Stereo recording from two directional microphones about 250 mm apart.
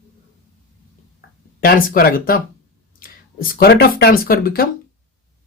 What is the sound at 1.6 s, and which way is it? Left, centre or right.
Speech, left.